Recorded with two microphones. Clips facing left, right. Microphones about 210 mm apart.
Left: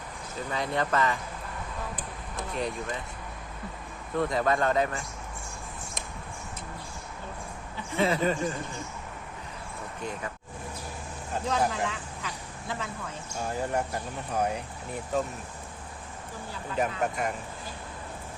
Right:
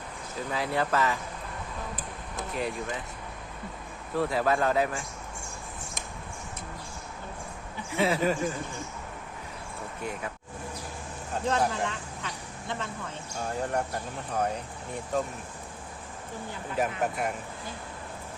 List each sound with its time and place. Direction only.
0.5 s speech: 5° right (ahead or behind)
4.1 s speech: 5° right (ahead or behind)
7.9 s speech: 5° right (ahead or behind)
11.4 s speech: centre (ahead or behind)
15.1 s speech: 5° left (ahead or behind)
16.7 s speech: centre (ahead or behind)